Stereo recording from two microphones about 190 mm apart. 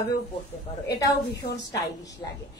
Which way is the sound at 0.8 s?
20° left (ahead or behind).